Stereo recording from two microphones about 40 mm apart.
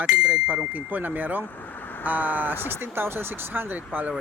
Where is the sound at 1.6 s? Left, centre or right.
Left.